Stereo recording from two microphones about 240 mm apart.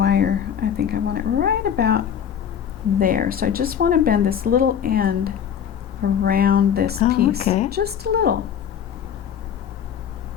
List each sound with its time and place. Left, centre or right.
0.0 s a woman's voice: right
7.4 s a woman's voice: left
7.7 s speech: right